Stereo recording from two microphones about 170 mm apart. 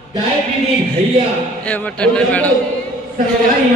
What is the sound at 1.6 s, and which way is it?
Speech, 5° left (ahead or behind).